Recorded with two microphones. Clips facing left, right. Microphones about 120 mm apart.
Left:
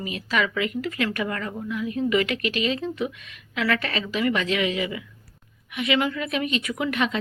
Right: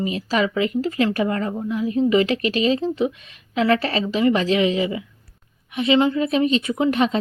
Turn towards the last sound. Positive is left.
turn(degrees=-35)  # may be behind; listen again after turning